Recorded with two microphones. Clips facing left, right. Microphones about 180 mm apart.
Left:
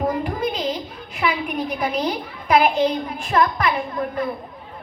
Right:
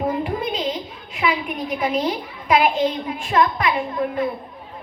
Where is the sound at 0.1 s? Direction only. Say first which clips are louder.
Even; 40° left (ahead or behind).